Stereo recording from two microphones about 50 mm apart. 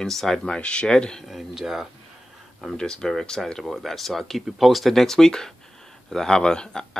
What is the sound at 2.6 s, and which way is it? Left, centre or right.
Speech, centre.